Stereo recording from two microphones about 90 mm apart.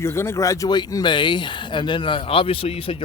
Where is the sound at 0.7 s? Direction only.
50° left (ahead or behind).